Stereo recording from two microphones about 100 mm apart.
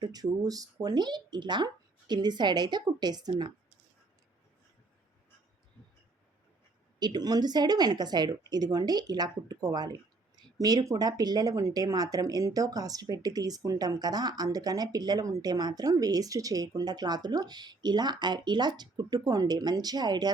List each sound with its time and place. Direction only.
0.0 s speech: 40° right (ahead or behind)
7.0 s speech: 45° right (ahead or behind)